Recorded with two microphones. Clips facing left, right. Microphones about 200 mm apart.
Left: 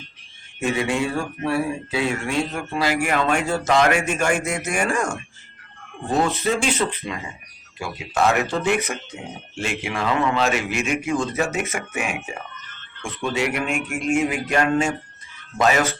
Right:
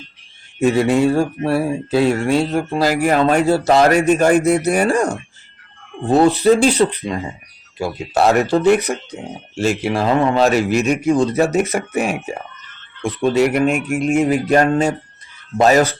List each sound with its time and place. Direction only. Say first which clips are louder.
0.6 s a man's voice: right 8 dB; 40° right (ahead or behind)
13.2 s a man's voice: right 9 dB; 40° right (ahead or behind)
13.8 s speech: right 5 dB; centre (ahead or behind)
14.2 s a man's voice: right 8 dB; 35° right (ahead or behind)